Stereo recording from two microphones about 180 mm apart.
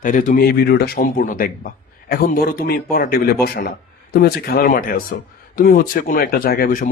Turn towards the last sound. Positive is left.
turn(degrees=50)  # may be behind; listen again after turning